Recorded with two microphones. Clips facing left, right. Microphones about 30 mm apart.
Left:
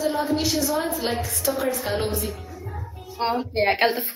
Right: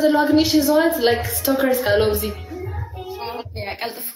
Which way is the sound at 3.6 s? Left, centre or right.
Left.